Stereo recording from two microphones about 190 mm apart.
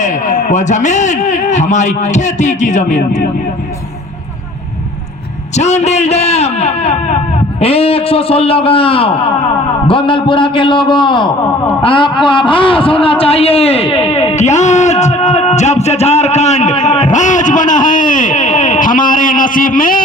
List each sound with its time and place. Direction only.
0.0 s a man's voice: 40° left (ahead or behind)
5.5 s a man's voice: 35° left (ahead or behind)